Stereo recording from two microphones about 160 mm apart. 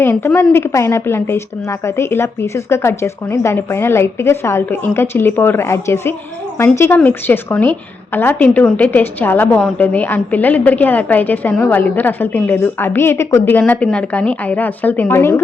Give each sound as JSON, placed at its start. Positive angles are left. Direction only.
{"t": 0.0, "sound": "a woman's voice", "side_deg": 15}